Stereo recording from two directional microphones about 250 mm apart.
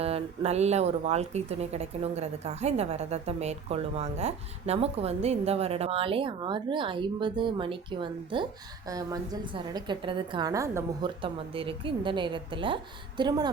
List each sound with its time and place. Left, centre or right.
0.0 s speech: right